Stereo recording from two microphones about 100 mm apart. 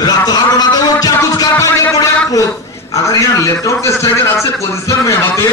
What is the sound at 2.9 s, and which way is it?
A man's voice, 35° left (ahead or behind).